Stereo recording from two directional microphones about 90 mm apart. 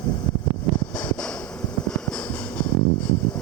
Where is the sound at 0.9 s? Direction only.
10° left (ahead or behind).